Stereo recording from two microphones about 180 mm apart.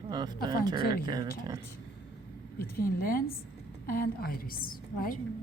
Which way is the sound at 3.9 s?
55° left (ahead or behind).